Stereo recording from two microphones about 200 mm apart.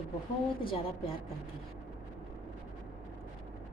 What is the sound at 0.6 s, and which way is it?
Speech, 25° left (ahead or behind).